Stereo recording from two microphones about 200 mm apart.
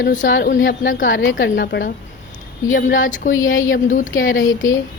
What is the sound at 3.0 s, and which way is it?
A woman's voice, 40° left (ahead or behind).